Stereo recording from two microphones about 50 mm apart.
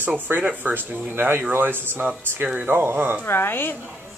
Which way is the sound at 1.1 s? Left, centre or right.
Right.